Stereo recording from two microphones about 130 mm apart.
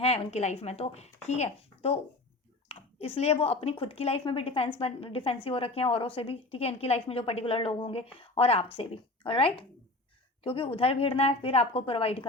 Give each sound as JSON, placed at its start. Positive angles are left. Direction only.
{"t": 0.0, "sound": "a woman's voice", "side_deg": 55}